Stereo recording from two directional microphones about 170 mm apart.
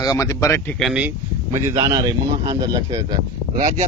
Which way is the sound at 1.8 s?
30° right (ahead or behind).